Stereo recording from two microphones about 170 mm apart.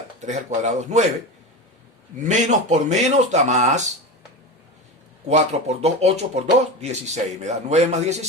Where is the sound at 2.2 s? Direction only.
45° right (ahead or behind).